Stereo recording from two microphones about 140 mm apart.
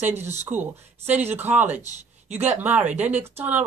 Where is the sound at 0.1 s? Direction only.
15° right (ahead or behind).